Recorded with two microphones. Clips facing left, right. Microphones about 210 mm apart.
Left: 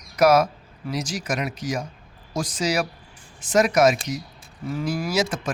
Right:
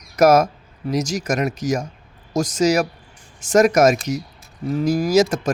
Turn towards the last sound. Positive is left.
turn(degrees=-40)  # may be behind; listen again after turning